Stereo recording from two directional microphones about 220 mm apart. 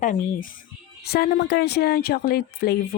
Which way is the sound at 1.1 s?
45° left (ahead or behind).